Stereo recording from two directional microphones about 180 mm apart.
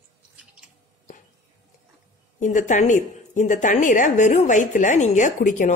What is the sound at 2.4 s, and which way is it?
A woman's voice, 45° left (ahead or behind).